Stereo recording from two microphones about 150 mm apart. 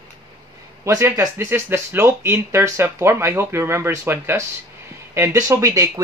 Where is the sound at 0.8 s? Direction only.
20° right (ahead or behind).